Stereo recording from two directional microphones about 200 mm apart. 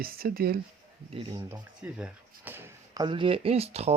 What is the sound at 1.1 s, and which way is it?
Speech, 25° right (ahead or behind).